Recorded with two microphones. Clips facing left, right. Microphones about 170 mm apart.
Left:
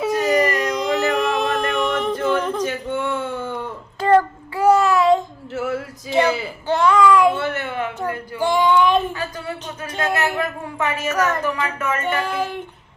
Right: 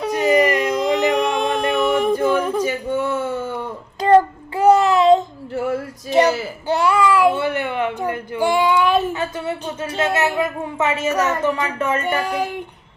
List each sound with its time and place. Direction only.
0.1 s dog: 20° right (ahead or behind)
0.6 s a sound: centre (ahead or behind)
1.1 s a capella: centre (ahead or behind)
4.1 s child singing: 20° right (ahead or behind)
5.7 s a sound: 15° right (ahead or behind)
9.1 s a sound: 20° right (ahead or behind)
11.1 s child singing: 10° right (ahead or behind)
11.8 s music: 30° right (ahead or behind)
12.2 s child singing: 15° right (ahead or behind)